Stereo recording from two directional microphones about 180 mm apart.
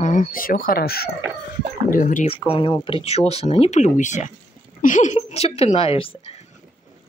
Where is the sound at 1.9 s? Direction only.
50° left (ahead or behind).